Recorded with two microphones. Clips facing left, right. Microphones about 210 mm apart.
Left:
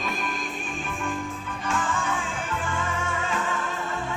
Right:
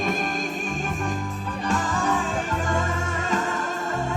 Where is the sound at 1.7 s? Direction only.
40° right (ahead or behind).